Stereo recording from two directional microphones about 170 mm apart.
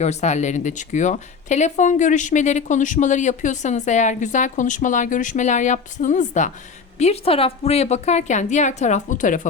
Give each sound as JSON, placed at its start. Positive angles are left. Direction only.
{"t": 0.0, "sound": "speech", "side_deg": 40}